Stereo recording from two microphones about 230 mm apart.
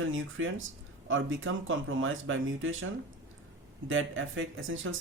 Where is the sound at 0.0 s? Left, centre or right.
Right.